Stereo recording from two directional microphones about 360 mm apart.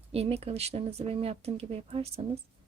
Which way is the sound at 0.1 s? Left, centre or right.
Centre.